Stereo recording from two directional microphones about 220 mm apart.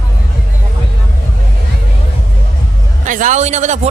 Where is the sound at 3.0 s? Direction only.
35° right (ahead or behind).